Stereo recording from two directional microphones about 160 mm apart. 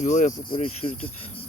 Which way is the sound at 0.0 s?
50° left (ahead or behind).